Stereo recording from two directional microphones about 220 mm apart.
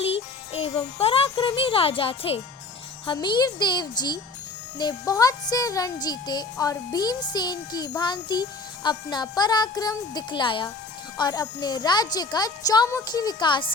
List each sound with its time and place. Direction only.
0.0 s a child's voice: 25° left (ahead or behind)